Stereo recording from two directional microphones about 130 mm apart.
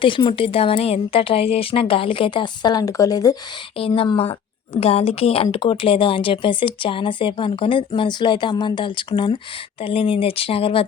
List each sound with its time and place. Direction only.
0.0 s speech: 40° left (ahead or behind)
3.8 s a woman's voice: 45° left (ahead or behind)